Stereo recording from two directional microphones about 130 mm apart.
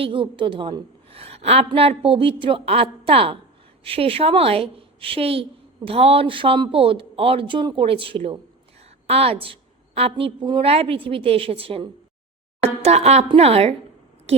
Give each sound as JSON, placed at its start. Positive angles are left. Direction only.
{"t": 0.0, "sound": "a woman's voice", "side_deg": -40}